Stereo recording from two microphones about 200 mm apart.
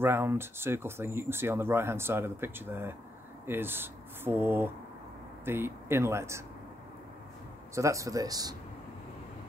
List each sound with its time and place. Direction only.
0.0 s speech: 10° right (ahead or behind)
7.7 s speech: 15° right (ahead or behind)